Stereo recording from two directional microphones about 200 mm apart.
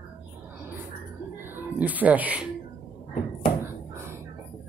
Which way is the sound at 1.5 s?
10° right (ahead or behind).